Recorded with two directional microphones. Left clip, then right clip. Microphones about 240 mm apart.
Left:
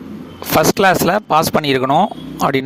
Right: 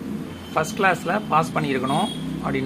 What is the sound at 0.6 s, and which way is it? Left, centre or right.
Speech, left.